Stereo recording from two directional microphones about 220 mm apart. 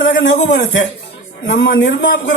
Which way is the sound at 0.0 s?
55° left (ahead or behind).